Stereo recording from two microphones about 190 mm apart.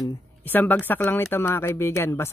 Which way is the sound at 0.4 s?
10° left (ahead or behind).